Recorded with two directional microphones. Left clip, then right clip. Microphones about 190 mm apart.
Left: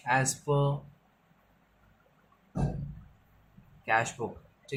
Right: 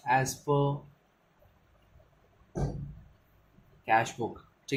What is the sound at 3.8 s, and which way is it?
Speech, 10° right (ahead or behind).